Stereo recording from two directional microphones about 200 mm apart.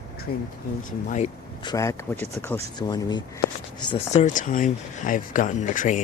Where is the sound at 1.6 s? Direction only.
20° left (ahead or behind).